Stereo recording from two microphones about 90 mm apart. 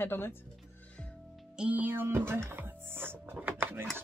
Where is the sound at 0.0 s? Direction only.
25° left (ahead or behind).